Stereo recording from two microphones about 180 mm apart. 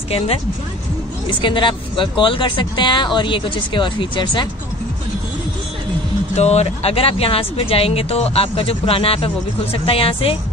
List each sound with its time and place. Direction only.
1.4 s speech: 25° left (ahead or behind)
6.3 s speech: 35° left (ahead or behind)